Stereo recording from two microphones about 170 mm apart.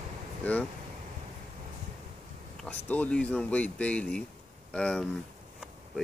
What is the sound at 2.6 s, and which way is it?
Speech, 10° left (ahead or behind).